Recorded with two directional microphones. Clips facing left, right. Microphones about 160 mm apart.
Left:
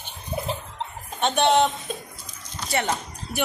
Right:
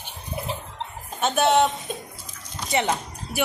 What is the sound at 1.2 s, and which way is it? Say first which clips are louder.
Speech: even; 5° right (ahead or behind).